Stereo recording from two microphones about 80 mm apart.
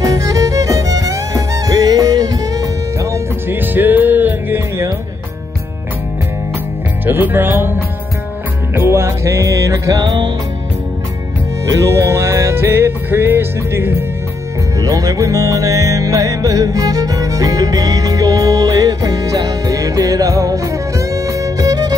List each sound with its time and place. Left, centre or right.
0.0 s music: right
3.4 s music: right
7.1 s music: right
8.7 s music: right
11.7 s music: right
14.8 s music: right